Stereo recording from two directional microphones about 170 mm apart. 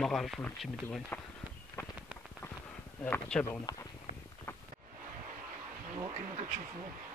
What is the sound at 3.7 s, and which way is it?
Speech, 25° left (ahead or behind).